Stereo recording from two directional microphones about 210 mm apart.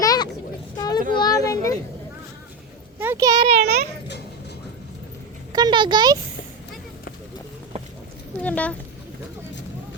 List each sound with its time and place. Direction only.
0.0 s a sound: 15° left (ahead or behind)
0.8 s child singing: 20° left (ahead or behind)
1.1 s a sound: 20° left (ahead or behind)
3.0 s a child's voice: 10° right (ahead or behind)
3.6 s a child's voice: 50° right (ahead or behind)
5.5 s speech: 20° right (ahead or behind)
8.4 s speech: 5° left (ahead or behind)